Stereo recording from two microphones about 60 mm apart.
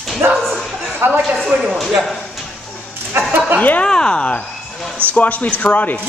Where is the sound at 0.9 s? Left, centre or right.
Right.